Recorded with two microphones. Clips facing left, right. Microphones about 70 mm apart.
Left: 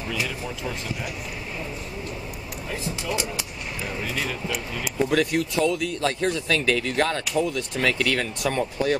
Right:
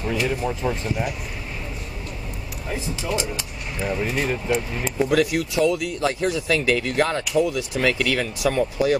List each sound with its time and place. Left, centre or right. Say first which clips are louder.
0.1 s speech: right 6 dB; right
3.8 s speech: right 6 dB; right
4.9 s speech: right 2 dB; centre